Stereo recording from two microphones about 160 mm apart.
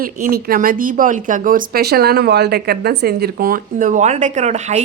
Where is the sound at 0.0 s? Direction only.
65° right (ahead or behind).